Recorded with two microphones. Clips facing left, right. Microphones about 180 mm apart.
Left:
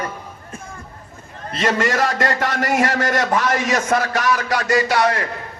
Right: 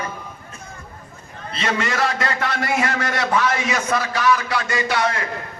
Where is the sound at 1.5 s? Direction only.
45° left (ahead or behind).